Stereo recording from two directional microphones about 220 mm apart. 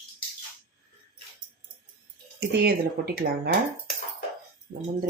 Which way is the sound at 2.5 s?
45° right (ahead or behind).